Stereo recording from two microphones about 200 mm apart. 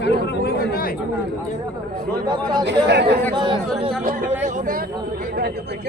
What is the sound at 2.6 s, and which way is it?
Speech, 55° right (ahead or behind).